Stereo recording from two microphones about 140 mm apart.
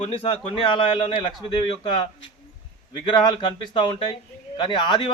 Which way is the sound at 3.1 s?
35° left (ahead or behind).